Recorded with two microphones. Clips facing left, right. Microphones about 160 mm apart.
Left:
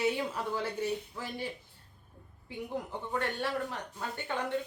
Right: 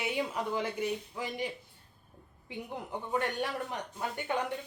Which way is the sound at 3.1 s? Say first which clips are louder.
Right 1 dB; 15° right (ahead or behind).